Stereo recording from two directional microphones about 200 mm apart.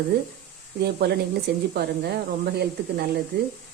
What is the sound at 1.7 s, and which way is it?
Speech, 55° right (ahead or behind).